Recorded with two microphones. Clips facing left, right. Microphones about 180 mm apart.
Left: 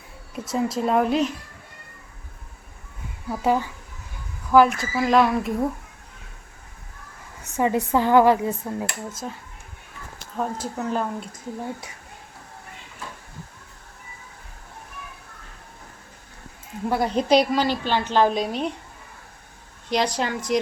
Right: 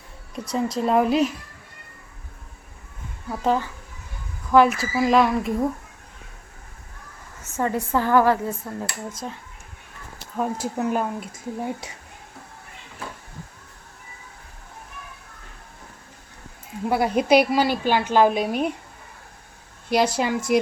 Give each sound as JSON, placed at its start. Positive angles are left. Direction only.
{"t": 0.3, "sound": "speech", "side_deg": 5}
{"t": 3.2, "sound": "speech", "side_deg": 5}
{"t": 4.5, "sound": "speech", "side_deg": 0}
{"t": 7.4, "sound": "speech", "side_deg": 15}
{"t": 9.2, "sound": "a woman's voice", "side_deg": 0}
{"t": 16.9, "sound": "a woman's voice", "side_deg": -10}
{"t": 19.9, "sound": "a woman's voice", "side_deg": -10}